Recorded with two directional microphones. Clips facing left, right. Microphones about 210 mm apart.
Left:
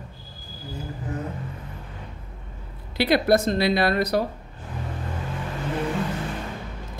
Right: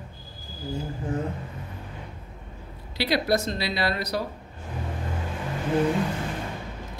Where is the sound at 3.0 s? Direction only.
55° left (ahead or behind).